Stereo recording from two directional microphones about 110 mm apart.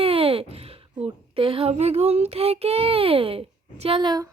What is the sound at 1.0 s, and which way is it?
Child singing, 55° right (ahead or behind).